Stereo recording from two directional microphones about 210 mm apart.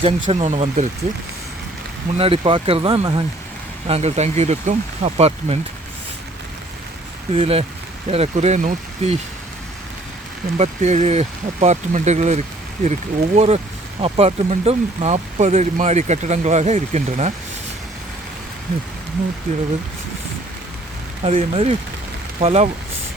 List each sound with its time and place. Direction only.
0.0 s speech: 30° right (ahead or behind)
2.1 s speech: 25° right (ahead or behind)
7.3 s speech: 30° right (ahead or behind)
10.6 s speech: 30° right (ahead or behind)
21.2 s speech: 30° right (ahead or behind)